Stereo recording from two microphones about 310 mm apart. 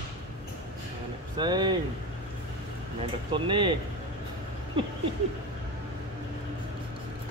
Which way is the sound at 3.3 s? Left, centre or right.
Centre.